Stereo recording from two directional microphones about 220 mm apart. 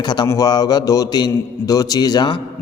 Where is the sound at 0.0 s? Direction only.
20° left (ahead or behind).